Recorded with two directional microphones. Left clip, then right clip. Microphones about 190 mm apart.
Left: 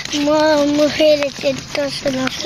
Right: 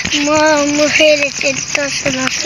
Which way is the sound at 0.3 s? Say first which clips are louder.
Right 1 dB; centre (ahead or behind).